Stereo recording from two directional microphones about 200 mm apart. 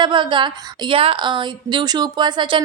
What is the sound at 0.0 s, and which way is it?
Speech, 25° right (ahead or behind).